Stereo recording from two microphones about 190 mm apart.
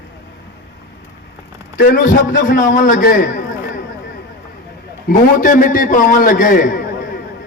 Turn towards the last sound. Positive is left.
turn(degrees=45)  # may be behind; listen again after turning